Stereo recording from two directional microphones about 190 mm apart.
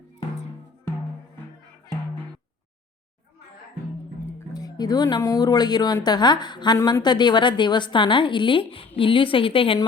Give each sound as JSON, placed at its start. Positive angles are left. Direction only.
{"t": 4.3, "sound": "speech", "side_deg": 15}